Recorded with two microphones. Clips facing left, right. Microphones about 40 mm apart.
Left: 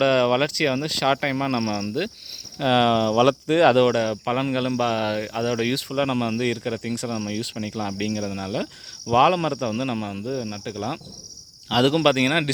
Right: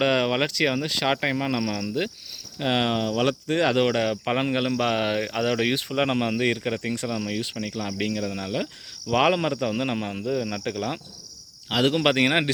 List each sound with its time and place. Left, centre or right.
0.0 s speech: centre
2.6 s speech: centre
3.1 s speech: left
4.0 s speech: right
5.5 s speech: right
7.2 s speech: right
7.6 s speech: centre
7.9 s speech: right
10.2 s speech: right
10.5 s cricket: right
11.7 s speech: centre
12.0 s speech: centre